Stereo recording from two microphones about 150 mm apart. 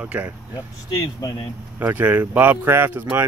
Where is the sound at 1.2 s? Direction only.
30° left (ahead or behind).